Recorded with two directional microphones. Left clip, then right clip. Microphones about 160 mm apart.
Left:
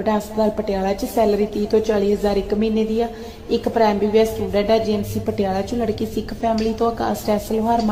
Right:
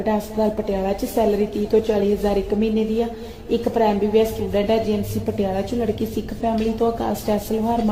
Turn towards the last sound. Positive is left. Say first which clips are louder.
# left 3 dB
turn(degrees=0)  # may be behind; listen again after turning